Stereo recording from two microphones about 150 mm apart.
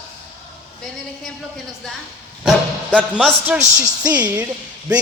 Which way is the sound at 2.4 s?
5° right (ahead or behind).